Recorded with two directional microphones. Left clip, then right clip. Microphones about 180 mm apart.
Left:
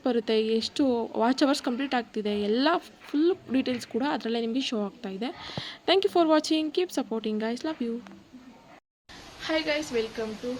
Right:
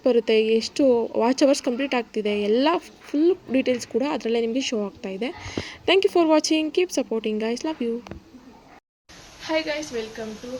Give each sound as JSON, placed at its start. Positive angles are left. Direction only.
{"t": 0.0, "sound": "speech", "side_deg": 0}
{"t": 9.4, "sound": "a woman's voice", "side_deg": 15}